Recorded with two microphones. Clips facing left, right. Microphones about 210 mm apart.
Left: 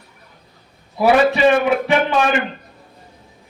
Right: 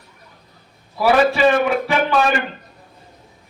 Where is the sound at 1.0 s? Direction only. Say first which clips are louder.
Left 1 dB; 20° left (ahead or behind).